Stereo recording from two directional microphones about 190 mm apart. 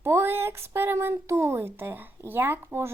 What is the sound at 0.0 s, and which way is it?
Speech, 10° right (ahead or behind).